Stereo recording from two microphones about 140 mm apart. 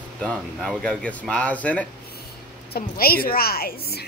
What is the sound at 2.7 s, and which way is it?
A woman's voice, 90° left.